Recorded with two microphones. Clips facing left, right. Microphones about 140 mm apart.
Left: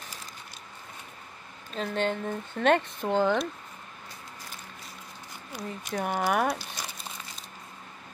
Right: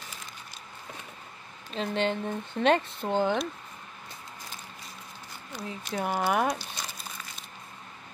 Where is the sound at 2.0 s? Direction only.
20° right (ahead or behind).